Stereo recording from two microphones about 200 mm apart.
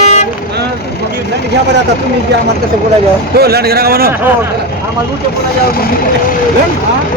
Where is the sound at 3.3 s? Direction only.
50° right (ahead or behind).